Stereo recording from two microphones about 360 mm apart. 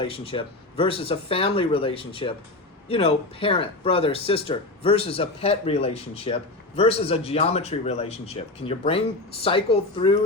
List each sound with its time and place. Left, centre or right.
0.0 s speech: centre